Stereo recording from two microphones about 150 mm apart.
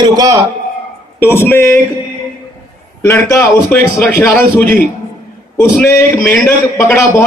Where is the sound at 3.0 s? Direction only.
15° left (ahead or behind).